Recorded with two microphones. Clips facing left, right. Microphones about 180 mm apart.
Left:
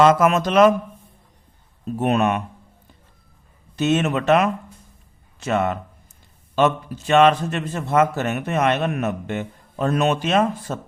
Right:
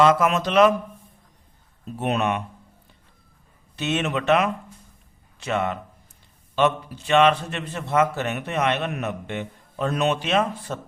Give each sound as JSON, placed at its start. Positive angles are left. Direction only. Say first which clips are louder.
{"t": 0.0, "sound": "a man's voice", "louder": "left 3 dB", "side_deg": 45}
{"t": 2.0, "sound": "a man's voice", "louder": "left 4 dB", "side_deg": 45}
{"t": 3.8, "sound": "a man's voice", "louder": "left 5 dB", "side_deg": 45}